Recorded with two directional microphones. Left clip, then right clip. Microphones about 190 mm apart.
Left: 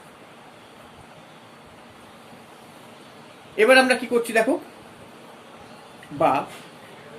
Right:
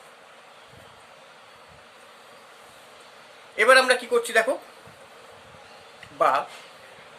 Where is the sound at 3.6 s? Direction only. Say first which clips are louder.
Left 1 dB; 35° right (ahead or behind).